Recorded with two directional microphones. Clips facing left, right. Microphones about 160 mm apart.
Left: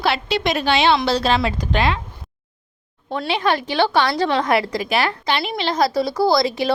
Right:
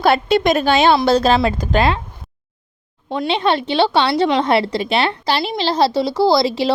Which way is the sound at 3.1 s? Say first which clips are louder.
Right 3 dB; 25° right (ahead or behind).